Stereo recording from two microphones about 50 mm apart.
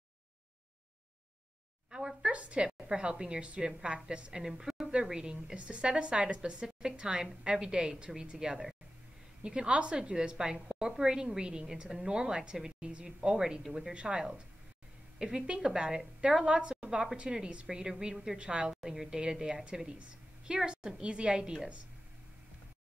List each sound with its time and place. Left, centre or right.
1.9 s a woman's voice: centre
18.8 s a woman's voice: centre